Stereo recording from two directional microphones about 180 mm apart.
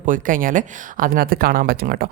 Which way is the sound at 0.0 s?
50° right (ahead or behind).